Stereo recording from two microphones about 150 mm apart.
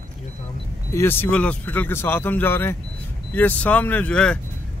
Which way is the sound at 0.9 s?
15° left (ahead or behind).